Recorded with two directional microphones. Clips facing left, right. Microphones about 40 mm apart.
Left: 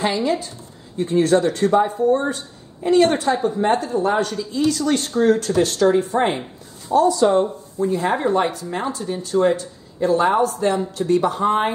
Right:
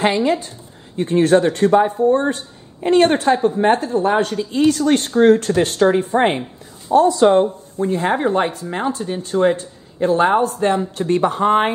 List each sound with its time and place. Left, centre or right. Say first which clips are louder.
0.0 s speech: right 4 dB; right